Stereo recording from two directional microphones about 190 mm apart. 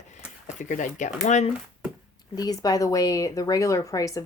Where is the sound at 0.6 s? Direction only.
40° left (ahead or behind).